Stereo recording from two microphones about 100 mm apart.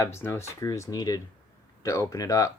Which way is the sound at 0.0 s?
25° left (ahead or behind).